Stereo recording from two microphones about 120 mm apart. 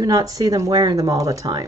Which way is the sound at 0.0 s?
30° right (ahead or behind).